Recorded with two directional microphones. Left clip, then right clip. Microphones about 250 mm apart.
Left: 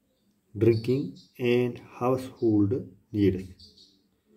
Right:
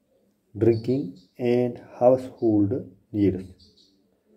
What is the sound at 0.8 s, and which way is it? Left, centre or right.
Speech, centre.